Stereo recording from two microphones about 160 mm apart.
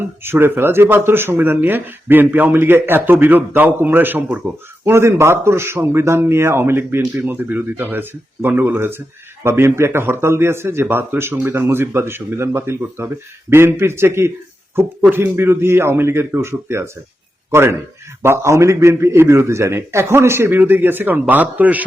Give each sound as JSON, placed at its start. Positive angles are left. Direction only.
{"t": 0.2, "sound": "speech", "side_deg": -15}